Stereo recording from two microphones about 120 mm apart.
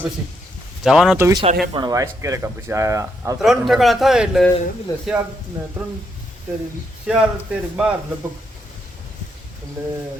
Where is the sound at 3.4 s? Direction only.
5° right (ahead or behind).